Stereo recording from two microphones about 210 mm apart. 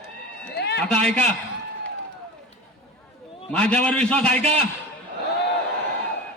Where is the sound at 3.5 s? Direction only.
5° left (ahead or behind).